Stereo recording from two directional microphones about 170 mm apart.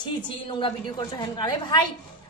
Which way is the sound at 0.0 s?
30° left (ahead or behind).